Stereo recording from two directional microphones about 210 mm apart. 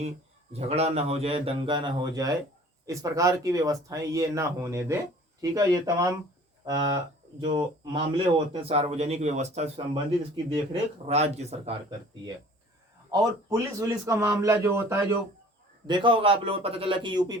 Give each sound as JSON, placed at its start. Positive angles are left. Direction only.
{"t": 0.5, "sound": "speech", "side_deg": -30}
{"t": 13.1, "sound": "speech", "side_deg": -15}
{"t": 15.9, "sound": "speech", "side_deg": -25}